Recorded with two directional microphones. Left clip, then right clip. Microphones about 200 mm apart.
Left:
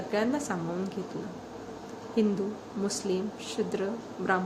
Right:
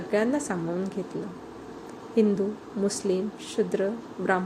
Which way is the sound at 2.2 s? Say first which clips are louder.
Right 5 dB; 15° right (ahead or behind).